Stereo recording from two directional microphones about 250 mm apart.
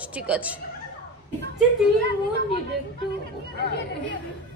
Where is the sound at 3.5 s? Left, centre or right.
Left.